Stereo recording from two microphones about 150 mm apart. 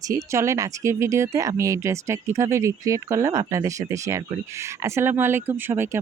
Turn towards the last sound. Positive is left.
turn(degrees=-15)  # may be behind; listen again after turning